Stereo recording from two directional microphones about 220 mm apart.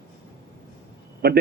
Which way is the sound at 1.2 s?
45° right (ahead or behind).